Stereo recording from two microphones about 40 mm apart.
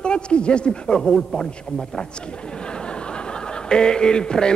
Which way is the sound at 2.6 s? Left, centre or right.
Left.